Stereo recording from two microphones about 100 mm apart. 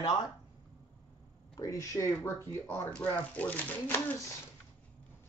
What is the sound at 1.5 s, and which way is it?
Speech, 30° left (ahead or behind).